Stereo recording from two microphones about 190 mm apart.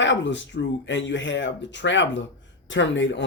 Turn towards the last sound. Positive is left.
turn(degrees=75)  # may be behind; listen again after turning